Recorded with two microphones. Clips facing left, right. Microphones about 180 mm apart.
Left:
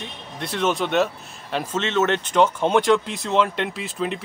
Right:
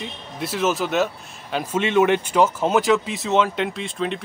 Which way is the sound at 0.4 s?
5° right (ahead or behind).